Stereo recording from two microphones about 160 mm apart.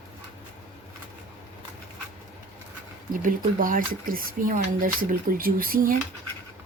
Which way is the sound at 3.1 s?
60° right (ahead or behind).